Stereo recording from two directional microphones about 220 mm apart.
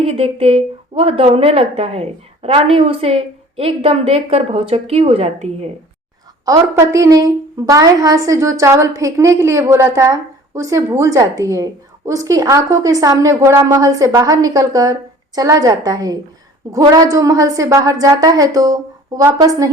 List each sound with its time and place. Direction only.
0.0 s speech: 25° right (ahead or behind)
6.4 s a woman's voice: 15° right (ahead or behind)